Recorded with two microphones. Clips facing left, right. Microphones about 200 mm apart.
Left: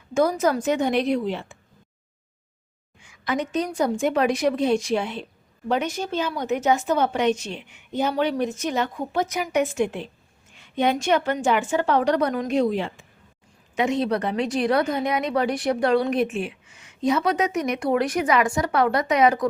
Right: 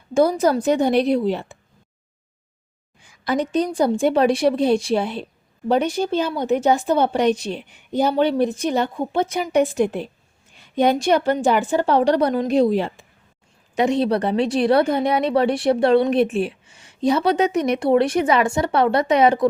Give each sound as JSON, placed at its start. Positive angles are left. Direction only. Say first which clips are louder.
{"t": 0.1, "sound": "a woman's voice", "louder": "right 4 dB", "side_deg": -30}
{"t": 3.0, "sound": "a woman's voice", "louder": "right 4 dB", "side_deg": -35}